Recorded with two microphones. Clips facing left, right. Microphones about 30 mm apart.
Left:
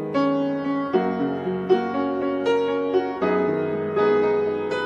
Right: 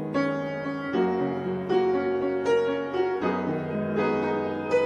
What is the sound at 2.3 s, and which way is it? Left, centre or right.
Music, left.